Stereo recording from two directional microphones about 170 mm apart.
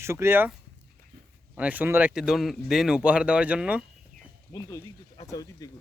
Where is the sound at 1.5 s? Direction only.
10° right (ahead or behind).